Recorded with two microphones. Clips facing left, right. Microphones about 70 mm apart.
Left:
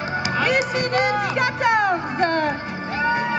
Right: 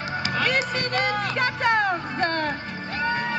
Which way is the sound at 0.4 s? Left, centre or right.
Centre.